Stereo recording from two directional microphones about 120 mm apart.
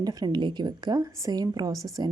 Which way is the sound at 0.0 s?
30° right (ahead or behind).